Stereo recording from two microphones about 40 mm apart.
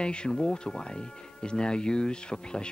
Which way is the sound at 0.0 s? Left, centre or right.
Left.